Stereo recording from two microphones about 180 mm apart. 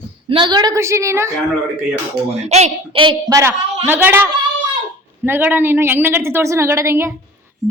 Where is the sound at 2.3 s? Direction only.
40° right (ahead or behind).